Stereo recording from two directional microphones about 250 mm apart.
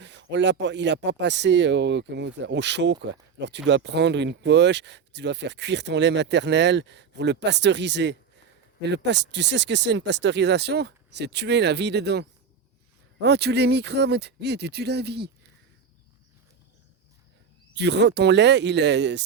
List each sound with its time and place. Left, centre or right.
0.0 s speech: right
13.2 s speech: right
17.7 s speech: right